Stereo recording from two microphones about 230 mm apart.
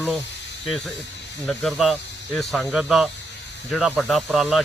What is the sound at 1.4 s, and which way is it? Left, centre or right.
Speech, centre.